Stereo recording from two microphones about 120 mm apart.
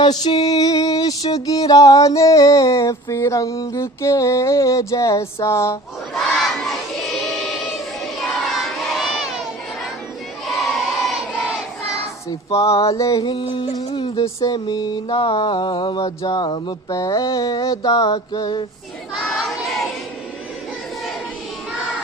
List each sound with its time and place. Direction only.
0.0 s music: 35° left (ahead or behind)
6.1 s choir: centre (ahead or behind)
8.4 s crowd: centre (ahead or behind)
10.4 s child singing: centre (ahead or behind)
12.6 s music: 30° left (ahead or behind)
13.2 s music: 45° left (ahead or behind)
14.4 s a sound: 35° left (ahead or behind)
19.1 s crowd: centre (ahead or behind)